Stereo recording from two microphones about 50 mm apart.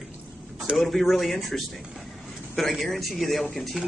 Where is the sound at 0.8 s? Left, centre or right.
Centre.